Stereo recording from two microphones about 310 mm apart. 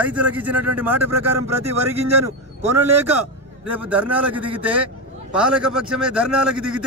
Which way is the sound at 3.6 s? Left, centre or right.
Centre.